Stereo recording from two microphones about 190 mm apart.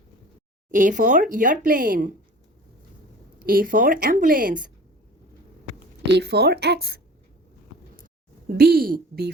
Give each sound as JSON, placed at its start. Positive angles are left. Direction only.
{"t": 0.7, "sound": "speech", "side_deg": -45}
{"t": 3.3, "sound": "speech", "side_deg": -50}
{"t": 6.1, "sound": "speech", "side_deg": -60}
{"t": 8.4, "sound": "speech", "side_deg": -55}